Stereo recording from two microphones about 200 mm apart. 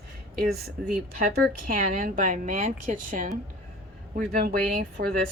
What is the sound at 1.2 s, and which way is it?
A woman's voice, 45° right (ahead or behind).